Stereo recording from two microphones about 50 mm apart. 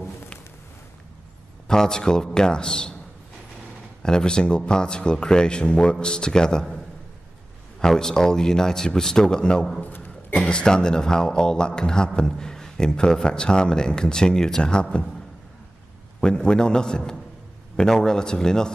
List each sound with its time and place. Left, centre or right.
1.7 s a man's voice: centre
4.0 s a man's voice: centre
7.8 s a man's voice: centre
9.8 s a sound: left
10.4 s a man's voice: centre
16.2 s a man's voice: centre